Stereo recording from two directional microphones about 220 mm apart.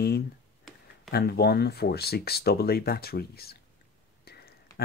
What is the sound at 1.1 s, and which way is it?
Speech, 45° left (ahead or behind).